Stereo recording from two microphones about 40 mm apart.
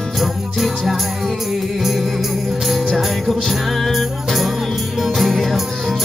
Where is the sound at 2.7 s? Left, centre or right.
Centre.